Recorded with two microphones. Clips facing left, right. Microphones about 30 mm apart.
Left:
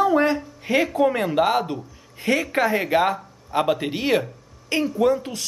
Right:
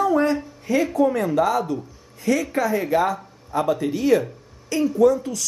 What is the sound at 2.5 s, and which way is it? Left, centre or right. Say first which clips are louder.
A man's voice: left 1 dB; left.